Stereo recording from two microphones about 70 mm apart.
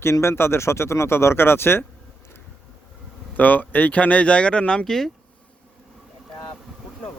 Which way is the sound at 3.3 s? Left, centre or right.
Left.